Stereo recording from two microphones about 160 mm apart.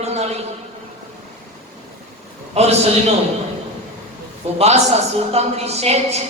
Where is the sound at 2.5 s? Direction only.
40° right (ahead or behind).